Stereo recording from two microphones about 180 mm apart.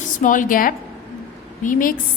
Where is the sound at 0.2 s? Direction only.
45° left (ahead or behind).